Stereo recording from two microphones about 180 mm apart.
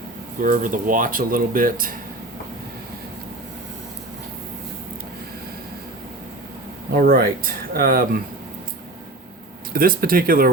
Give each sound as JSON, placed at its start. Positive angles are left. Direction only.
{"t": 0.4, "sound": "speech", "side_deg": -45}
{"t": 6.9, "sound": "speech", "side_deg": -55}
{"t": 9.7, "sound": "speech", "side_deg": -55}